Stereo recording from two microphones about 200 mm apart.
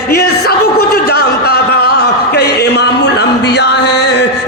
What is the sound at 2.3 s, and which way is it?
Music, 55° left (ahead or behind).